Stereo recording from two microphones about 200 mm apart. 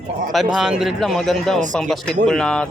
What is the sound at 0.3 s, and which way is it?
A man's voice, centre (ahead or behind).